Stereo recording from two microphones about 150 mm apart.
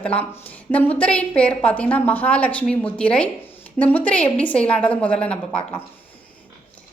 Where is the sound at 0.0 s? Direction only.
10° left (ahead or behind).